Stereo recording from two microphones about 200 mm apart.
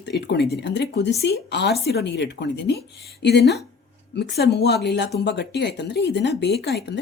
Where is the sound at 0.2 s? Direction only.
55° left (ahead or behind).